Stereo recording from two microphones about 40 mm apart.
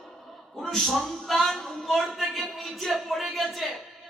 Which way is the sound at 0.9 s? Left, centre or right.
Centre.